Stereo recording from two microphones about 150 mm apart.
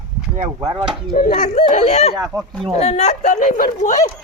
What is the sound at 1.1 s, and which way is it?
Speech, 70° left (ahead or behind).